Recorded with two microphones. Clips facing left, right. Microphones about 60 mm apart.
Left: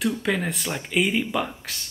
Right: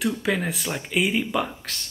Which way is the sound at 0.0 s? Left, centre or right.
Centre.